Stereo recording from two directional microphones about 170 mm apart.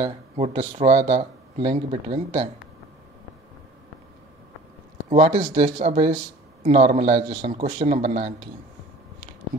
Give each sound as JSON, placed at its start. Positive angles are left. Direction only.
{"t": 0.0, "sound": "speech", "side_deg": -35}
{"t": 5.2, "sound": "speech", "side_deg": -30}
{"t": 5.5, "sound": "speech", "side_deg": -40}